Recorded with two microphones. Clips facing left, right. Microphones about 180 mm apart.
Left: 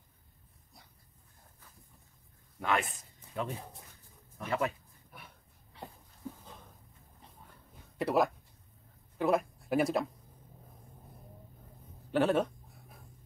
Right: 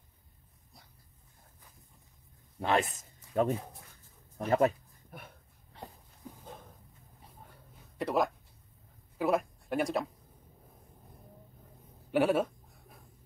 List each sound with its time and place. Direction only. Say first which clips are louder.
2.6 s speech: right 2 dB; 30° right (ahead or behind)
3.0 s a sound: right 8 dB; 45° right (ahead or behind)
8.0 s speech: left 1 dB; centre (ahead or behind)
12.1 s speech: right 1 dB; 10° right (ahead or behind)